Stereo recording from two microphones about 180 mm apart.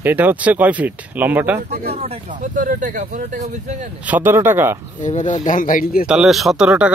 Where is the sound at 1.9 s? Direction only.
35° right (ahead or behind).